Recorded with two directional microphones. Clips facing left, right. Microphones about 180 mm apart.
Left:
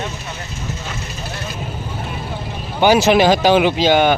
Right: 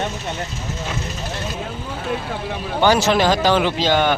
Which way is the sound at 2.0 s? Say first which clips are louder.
Right 3 dB; 90° right.